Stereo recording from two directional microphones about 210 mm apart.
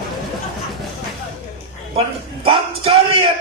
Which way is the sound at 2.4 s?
25° right (ahead or behind).